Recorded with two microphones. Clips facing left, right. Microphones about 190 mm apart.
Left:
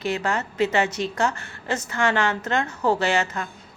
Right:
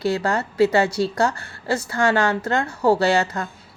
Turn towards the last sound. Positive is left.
turn(degrees=-35)  # may be behind; listen again after turning